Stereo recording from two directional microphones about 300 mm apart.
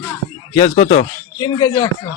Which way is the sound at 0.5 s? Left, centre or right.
Left.